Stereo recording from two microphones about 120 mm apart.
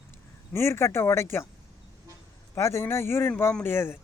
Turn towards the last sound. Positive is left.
turn(degrees=20)  # may be behind; listen again after turning